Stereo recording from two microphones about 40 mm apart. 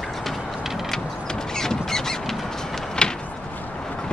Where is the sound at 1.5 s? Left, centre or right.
Centre.